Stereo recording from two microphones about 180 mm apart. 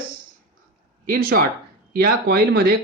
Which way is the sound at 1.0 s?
55° right (ahead or behind).